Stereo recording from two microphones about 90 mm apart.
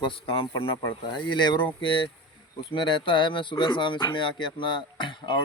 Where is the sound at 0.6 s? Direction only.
60° left (ahead or behind).